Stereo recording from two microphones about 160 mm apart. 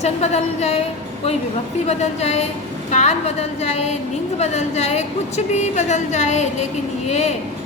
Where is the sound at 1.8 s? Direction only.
45° left (ahead or behind).